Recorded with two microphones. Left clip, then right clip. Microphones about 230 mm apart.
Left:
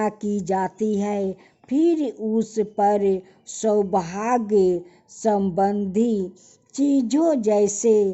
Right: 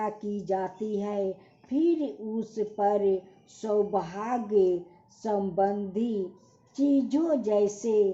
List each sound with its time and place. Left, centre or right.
0.0 s speech: left